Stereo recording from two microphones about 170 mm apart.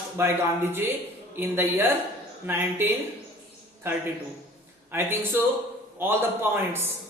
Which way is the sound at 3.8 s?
15° right (ahead or behind).